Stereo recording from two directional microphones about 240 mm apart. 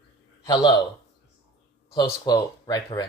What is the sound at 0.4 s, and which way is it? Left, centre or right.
Speech, centre.